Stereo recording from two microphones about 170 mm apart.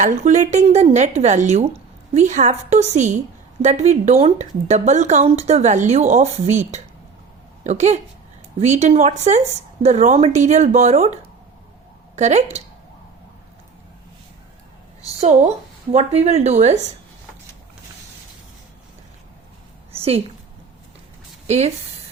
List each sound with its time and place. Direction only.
0.0 s a woman's voice: 45° right (ahead or behind)
15.2 s speech: 40° right (ahead or behind)
20.0 s a woman's voice: 35° right (ahead or behind)
21.4 s speech: 40° right (ahead or behind)